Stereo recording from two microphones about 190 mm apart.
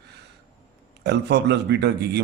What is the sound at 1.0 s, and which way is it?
Speech, 60° right (ahead or behind).